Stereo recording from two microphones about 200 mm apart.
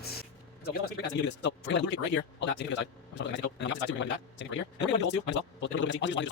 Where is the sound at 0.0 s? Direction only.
50° left (ahead or behind).